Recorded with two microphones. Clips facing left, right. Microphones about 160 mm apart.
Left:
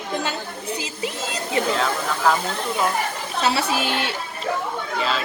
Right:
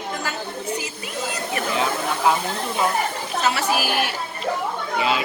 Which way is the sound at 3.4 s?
25° left (ahead or behind).